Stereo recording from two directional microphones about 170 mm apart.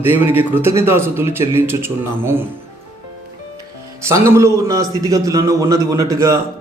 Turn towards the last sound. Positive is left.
turn(degrees=-20)  # may be behind; listen again after turning